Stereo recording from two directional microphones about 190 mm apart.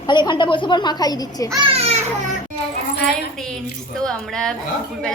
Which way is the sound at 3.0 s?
5° left (ahead or behind).